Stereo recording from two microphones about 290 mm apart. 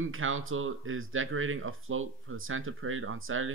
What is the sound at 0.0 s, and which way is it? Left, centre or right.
Speech, right.